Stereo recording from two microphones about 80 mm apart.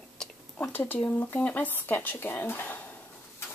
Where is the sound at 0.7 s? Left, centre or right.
Left.